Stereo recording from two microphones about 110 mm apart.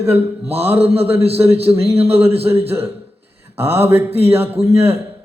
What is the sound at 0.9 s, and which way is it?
Speech, 20° right (ahead or behind).